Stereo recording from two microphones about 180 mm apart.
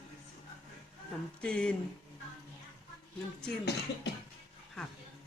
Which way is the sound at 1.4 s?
5° left (ahead or behind).